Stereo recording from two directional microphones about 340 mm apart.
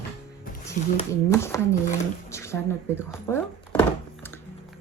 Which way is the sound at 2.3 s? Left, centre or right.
Centre.